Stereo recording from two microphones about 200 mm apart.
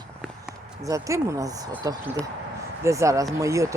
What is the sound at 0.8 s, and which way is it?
Speech, 15° right (ahead or behind).